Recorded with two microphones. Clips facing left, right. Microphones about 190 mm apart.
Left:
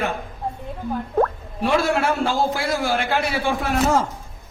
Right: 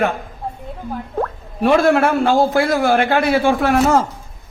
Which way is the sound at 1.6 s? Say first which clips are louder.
Right 6 dB; 55° right (ahead or behind).